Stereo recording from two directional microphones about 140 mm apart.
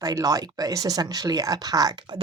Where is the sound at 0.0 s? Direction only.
25° right (ahead or behind).